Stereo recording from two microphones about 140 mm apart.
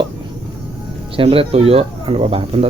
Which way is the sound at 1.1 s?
40° right (ahead or behind).